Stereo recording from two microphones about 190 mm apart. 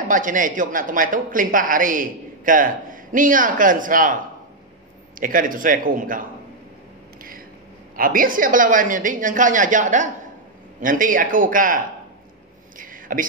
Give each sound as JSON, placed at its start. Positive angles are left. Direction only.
{"t": 0.1, "sound": "speech", "side_deg": -45}
{"t": 5.2, "sound": "speech", "side_deg": -45}
{"t": 7.9, "sound": "speech", "side_deg": -45}
{"t": 12.7, "sound": "a sound", "side_deg": -45}